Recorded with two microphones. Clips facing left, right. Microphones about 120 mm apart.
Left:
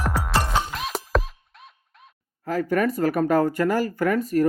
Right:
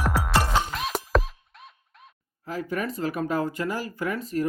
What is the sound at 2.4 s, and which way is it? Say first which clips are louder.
Speech: left 7 dB; 50° left (ahead or behind).